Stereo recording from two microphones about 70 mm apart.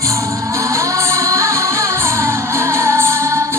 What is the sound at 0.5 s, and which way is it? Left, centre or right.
Music, right.